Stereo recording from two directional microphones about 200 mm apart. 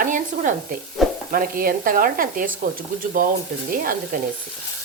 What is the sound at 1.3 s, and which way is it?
Speech, 45° right (ahead or behind).